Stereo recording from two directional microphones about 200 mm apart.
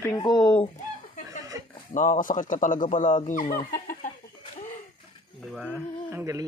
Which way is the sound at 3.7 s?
40° left (ahead or behind).